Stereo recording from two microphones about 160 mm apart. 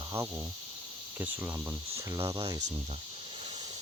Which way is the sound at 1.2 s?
10° right (ahead or behind).